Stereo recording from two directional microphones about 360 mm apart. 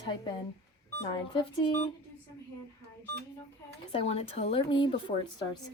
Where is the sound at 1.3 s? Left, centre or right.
Centre.